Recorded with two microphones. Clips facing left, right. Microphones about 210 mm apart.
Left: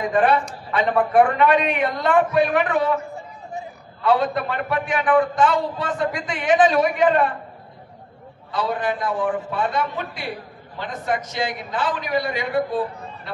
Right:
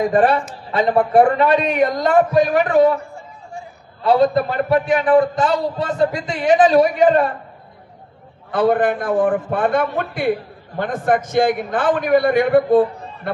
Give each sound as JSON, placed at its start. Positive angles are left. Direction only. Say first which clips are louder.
{"t": 0.1, "sound": "a man's voice", "louder": "right 3 dB", "side_deg": -40}
{"t": 4.0, "sound": "a man's voice", "louder": "right 5 dB", "side_deg": -40}
{"t": 8.5, "sound": "a man's voice", "louder": "right 8 dB", "side_deg": -55}